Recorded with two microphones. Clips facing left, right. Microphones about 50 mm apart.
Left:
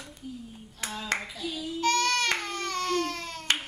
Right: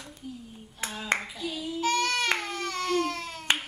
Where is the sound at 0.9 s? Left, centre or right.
Centre.